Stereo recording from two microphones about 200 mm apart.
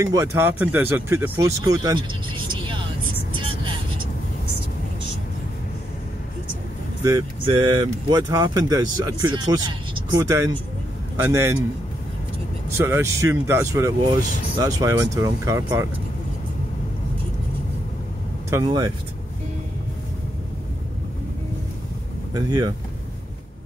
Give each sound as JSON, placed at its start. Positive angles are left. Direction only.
{"t": 0.0, "sound": "speech", "side_deg": -15}
{"t": 7.0, "sound": "speech", "side_deg": -15}
{"t": 12.7, "sound": "speech", "side_deg": -15}
{"t": 18.5, "sound": "speech", "side_deg": -20}
{"t": 22.3, "sound": "speech", "side_deg": -20}